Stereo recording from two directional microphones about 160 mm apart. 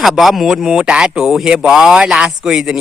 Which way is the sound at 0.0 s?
Centre (ahead or behind).